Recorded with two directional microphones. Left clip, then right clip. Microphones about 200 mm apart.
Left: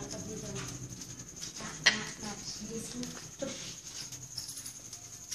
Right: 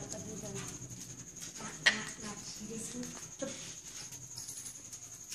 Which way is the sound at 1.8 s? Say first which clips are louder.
Left 2 dB; centre (ahead or behind).